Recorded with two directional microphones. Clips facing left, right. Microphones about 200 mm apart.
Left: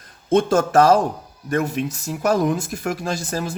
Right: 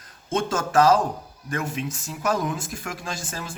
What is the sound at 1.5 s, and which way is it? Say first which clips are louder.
Speech: left 7 dB; 40° left (ahead or behind).